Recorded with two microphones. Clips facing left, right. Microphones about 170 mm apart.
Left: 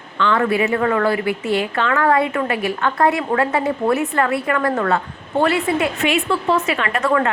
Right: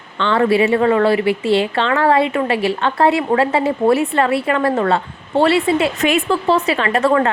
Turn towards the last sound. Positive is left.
turn(degrees=-30)  # may be behind; listen again after turning